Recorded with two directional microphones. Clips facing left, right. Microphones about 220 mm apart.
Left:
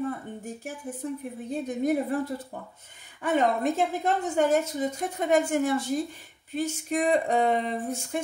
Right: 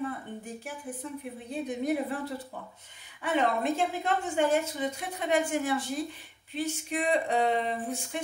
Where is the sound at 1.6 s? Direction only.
45° left (ahead or behind).